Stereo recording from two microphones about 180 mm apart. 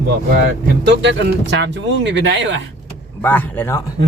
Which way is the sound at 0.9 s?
70° right (ahead or behind).